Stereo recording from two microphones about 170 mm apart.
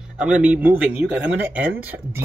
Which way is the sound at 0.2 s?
10° right (ahead or behind).